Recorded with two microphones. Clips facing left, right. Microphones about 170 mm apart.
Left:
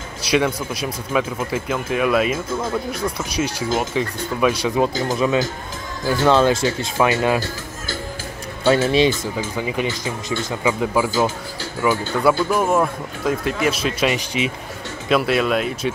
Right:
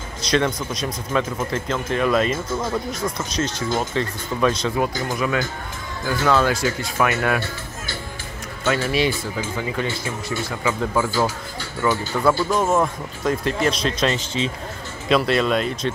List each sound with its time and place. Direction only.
0.2 s speech: 10° left (ahead or behind)
5.1 s speech: 25° left (ahead or behind)
8.7 s speech: 20° left (ahead or behind); by 15.9 s 5° left (ahead or behind)